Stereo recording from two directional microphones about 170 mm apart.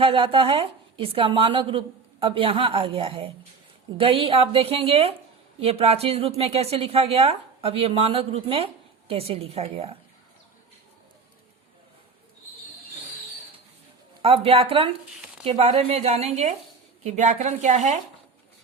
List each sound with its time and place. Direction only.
0.0 s a woman's voice: 30° right (ahead or behind)
14.2 s a woman's voice: 35° right (ahead or behind)